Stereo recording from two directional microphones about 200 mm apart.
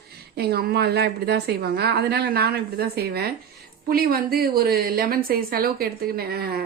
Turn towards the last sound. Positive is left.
turn(degrees=-50)  # may be behind; listen again after turning